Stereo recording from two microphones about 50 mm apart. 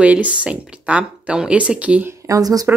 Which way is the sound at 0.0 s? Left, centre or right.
Right.